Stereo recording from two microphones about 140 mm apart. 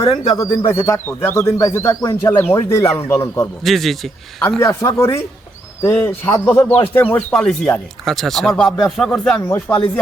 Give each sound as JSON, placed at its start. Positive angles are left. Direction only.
{"t": 0.0, "sound": "speech", "side_deg": 30}
{"t": 3.6, "sound": "speech", "side_deg": 0}
{"t": 4.6, "sound": "speech", "side_deg": 20}
{"t": 9.4, "sound": "speech", "side_deg": 15}